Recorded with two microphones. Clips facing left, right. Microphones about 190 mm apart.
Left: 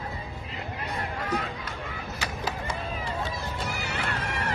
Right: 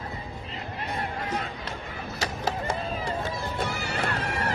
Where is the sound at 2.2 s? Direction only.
40° right (ahead or behind).